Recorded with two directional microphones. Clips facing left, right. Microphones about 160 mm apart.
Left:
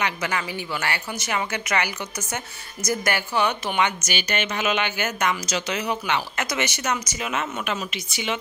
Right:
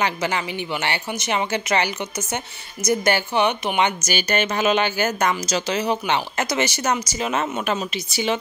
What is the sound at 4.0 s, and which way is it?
Speech, 40° right (ahead or behind).